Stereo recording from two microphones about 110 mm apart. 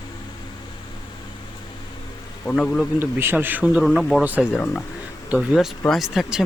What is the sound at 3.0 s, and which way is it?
Speech, 20° right (ahead or behind).